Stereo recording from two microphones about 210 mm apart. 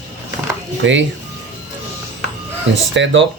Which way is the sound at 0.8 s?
60° right (ahead or behind).